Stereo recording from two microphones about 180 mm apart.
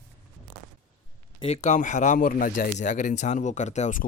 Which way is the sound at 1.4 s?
35° left (ahead or behind).